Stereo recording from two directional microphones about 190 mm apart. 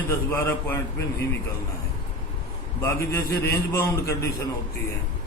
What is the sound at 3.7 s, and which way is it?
Speech, 15° left (ahead or behind).